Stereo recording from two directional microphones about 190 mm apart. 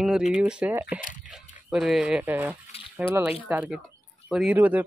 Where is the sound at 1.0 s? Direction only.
45° left (ahead or behind).